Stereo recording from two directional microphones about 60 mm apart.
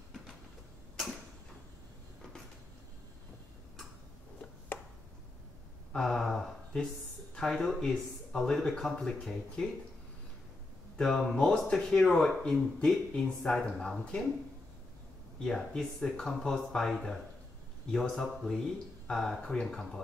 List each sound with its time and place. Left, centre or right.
5.9 s a sound: centre
7.3 s speech: centre
11.0 s speech: centre
15.4 s speech: centre